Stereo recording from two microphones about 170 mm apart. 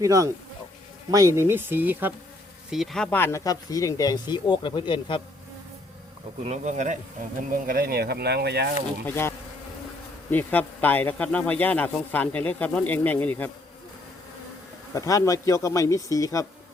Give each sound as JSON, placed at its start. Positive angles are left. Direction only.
{"t": 0.0, "sound": "speech", "side_deg": -20}
{"t": 6.4, "sound": "speech", "side_deg": -40}
{"t": 7.5, "sound": "speech", "side_deg": -60}
{"t": 9.0, "sound": "speech", "side_deg": 15}
{"t": 10.3, "sound": "speech", "side_deg": 10}
{"t": 14.9, "sound": "speech", "side_deg": 20}